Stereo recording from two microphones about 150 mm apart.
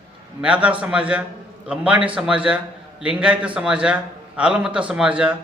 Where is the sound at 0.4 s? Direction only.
10° right (ahead or behind).